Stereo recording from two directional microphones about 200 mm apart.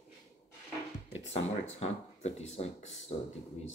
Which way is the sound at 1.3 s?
35° left (ahead or behind).